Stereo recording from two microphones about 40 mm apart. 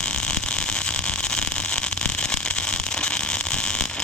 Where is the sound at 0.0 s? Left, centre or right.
Left.